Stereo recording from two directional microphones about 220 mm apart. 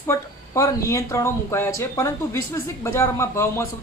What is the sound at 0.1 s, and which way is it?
Speech, 15° left (ahead or behind).